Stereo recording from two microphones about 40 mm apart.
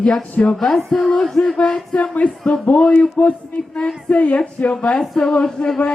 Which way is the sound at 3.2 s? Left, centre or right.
Left.